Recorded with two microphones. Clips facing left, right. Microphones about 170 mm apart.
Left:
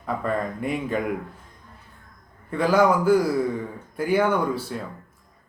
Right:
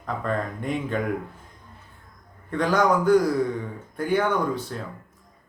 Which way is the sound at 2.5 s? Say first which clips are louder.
Left 2 dB; 5° left (ahead or behind).